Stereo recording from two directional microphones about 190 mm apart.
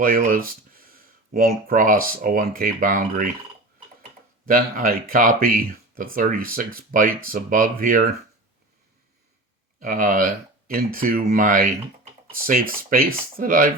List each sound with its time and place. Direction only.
0.0 s speech: 45° right (ahead or behind)
4.4 s speech: 50° right (ahead or behind)
9.8 s speech: 45° right (ahead or behind)